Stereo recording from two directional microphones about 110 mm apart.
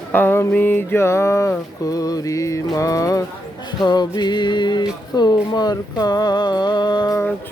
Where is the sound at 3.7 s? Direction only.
40° left (ahead or behind).